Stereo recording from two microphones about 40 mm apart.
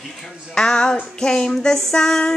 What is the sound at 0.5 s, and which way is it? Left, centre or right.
Child singing, centre.